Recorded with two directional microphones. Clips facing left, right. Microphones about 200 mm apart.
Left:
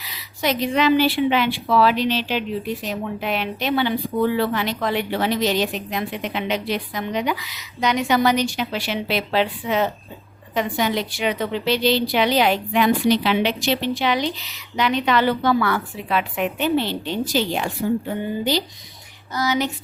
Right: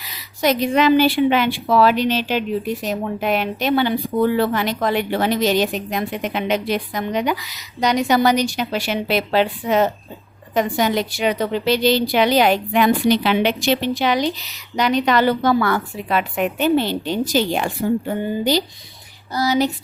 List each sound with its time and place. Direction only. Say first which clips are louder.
0.0 s a woman's voice: right 4 dB; 45° right (ahead or behind)
19.3 s speech: right 4 dB; 35° right (ahead or behind)